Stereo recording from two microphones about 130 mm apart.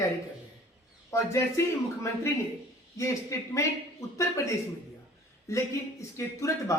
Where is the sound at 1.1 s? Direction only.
20° left (ahead or behind).